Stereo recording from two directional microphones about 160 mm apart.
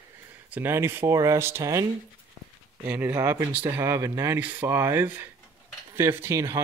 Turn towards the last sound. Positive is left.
turn(degrees=-15)  # may be behind; listen again after turning